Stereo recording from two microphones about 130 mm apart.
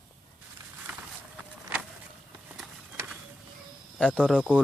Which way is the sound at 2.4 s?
5° right (ahead or behind).